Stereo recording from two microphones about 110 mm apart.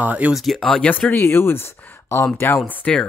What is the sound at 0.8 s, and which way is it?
Speech, 15° left (ahead or behind).